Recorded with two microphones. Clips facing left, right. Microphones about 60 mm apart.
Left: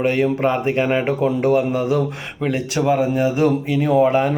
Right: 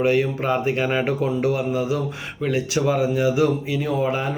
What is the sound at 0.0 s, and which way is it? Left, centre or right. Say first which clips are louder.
Speech: left 2 dB; left.